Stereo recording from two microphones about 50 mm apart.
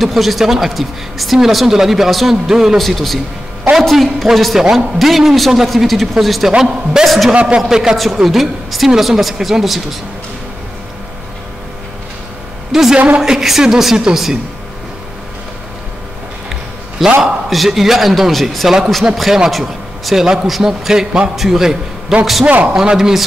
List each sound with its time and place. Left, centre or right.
0.0 s speech: centre
2.8 s a woman's voice: centre
7.1 s speech: centre
7.3 s speech: right
7.7 s a woman's voice: centre
12.7 s a woman's voice: centre
17.2 s a woman's voice: centre